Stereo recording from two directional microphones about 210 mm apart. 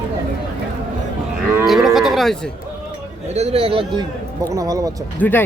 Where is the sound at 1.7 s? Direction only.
Centre (ahead or behind).